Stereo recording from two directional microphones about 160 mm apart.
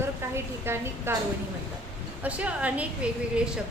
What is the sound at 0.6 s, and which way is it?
Speech, 15° right (ahead or behind).